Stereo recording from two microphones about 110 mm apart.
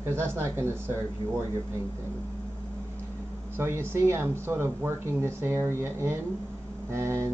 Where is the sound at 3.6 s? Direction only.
25° right (ahead or behind).